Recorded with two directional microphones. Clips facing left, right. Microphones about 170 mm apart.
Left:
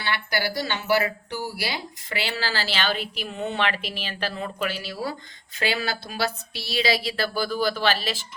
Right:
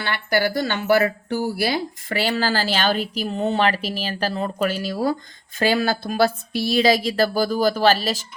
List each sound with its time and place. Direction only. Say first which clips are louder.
0.0 s speech: right 6 dB; 50° right (ahead or behind)